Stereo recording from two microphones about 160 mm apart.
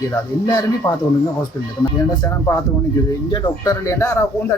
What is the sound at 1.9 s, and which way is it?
Speech, 20° left (ahead or behind).